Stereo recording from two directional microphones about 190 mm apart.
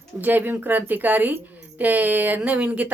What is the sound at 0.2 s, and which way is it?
Speech, 10° right (ahead or behind).